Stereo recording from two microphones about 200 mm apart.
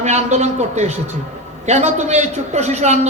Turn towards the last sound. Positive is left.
turn(degrees=-35)  # may be behind; listen again after turning